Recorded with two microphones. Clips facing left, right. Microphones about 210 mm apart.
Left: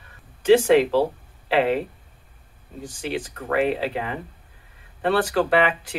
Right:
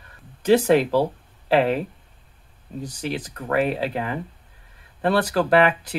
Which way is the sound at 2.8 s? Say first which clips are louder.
Even; 40° right (ahead or behind).